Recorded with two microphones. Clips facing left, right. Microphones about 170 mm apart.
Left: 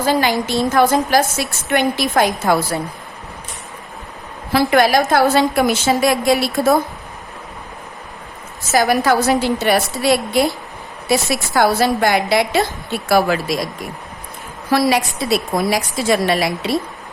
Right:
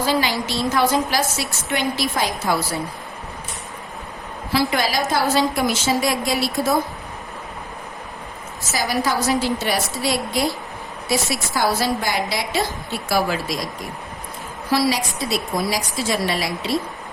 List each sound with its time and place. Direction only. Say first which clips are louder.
0.0 s a woman's voice: left 4 dB; 50° left (ahead or behind)
4.5 s a woman's voice: left 7 dB; 55° left (ahead or behind)
8.7 s a woman's voice: left 7 dB; 55° left (ahead or behind)
14.7 s a woman's voice: left 4 dB; 55° left (ahead or behind)